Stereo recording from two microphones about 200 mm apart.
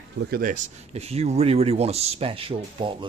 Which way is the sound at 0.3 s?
45° right (ahead or behind).